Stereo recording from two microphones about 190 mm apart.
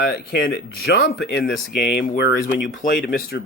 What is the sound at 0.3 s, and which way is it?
Speech, 55° left (ahead or behind).